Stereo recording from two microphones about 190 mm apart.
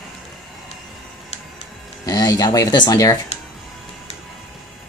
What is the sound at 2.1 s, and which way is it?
Speech, 20° left (ahead or behind).